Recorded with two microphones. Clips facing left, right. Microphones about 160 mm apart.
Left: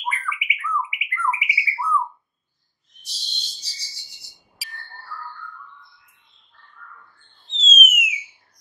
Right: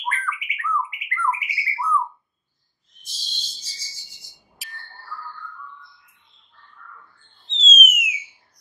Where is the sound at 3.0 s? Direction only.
70° left (ahead or behind).